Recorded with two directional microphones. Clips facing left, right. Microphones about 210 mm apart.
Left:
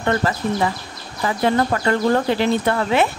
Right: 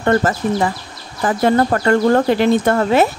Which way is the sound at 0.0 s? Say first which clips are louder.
Right 5 dB; 45° right (ahead or behind).